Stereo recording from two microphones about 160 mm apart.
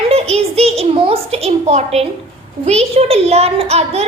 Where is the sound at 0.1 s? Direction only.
40° right (ahead or behind).